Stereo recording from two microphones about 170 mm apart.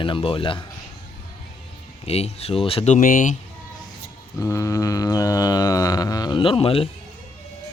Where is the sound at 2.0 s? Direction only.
35° left (ahead or behind).